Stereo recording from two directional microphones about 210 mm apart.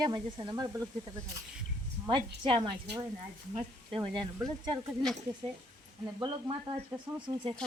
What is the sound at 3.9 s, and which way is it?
Speech, 20° right (ahead or behind).